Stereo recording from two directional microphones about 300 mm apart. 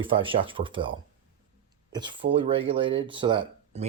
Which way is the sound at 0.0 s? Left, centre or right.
Centre.